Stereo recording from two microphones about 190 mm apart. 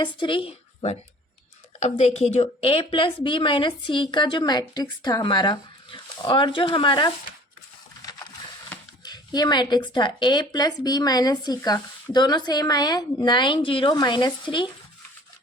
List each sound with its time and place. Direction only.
0.0 s a woman's voice: 25° left (ahead or behind)
9.0 s a woman's voice: 20° left (ahead or behind)